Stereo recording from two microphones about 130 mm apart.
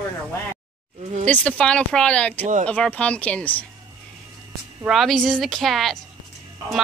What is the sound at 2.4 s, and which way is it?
Speech, 70° right (ahead or behind).